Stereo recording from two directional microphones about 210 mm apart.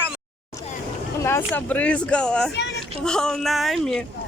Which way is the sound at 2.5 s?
55° left (ahead or behind).